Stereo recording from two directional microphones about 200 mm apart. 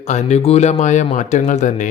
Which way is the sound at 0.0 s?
35° left (ahead or behind).